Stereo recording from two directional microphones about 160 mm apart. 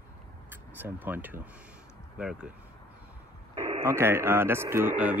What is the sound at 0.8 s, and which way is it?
Speech, 10° right (ahead or behind).